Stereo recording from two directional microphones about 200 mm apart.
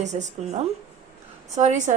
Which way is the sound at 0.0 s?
35° right (ahead or behind).